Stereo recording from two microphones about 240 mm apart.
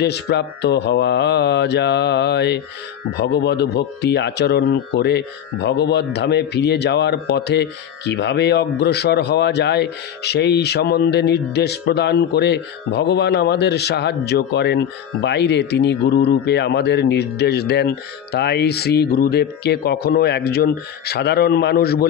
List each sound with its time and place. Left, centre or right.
0.0 s speech: left